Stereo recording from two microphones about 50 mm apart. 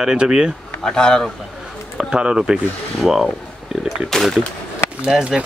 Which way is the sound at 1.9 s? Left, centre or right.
Centre.